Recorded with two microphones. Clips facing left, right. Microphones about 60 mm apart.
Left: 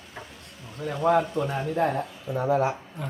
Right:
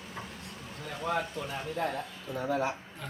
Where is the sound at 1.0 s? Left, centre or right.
Left.